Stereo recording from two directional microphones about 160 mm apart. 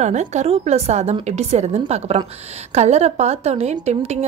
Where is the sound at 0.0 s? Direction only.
45° right (ahead or behind).